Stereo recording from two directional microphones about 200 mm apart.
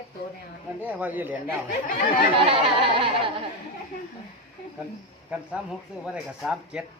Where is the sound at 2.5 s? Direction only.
25° right (ahead or behind).